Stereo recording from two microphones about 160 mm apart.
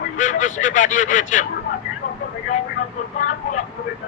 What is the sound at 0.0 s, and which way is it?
Speech, 55° left (ahead or behind).